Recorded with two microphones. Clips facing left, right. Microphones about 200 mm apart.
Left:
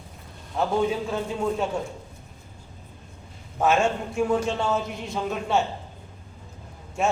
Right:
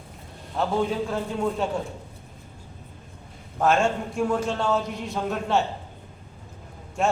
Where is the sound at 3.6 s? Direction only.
5° left (ahead or behind).